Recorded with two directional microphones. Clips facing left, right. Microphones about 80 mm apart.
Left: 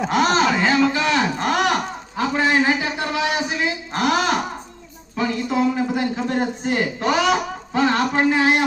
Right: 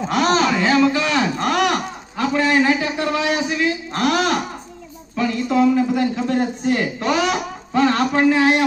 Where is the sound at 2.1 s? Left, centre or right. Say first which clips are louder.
Right 1 dB; left.